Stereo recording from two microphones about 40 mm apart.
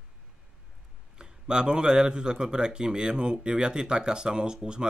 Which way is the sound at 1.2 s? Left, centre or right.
Centre.